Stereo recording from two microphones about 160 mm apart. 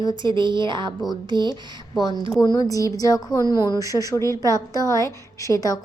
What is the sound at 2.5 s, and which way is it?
A woman's voice, 20° left (ahead or behind).